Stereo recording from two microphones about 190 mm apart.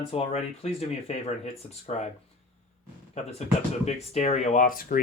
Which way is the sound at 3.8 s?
35° left (ahead or behind).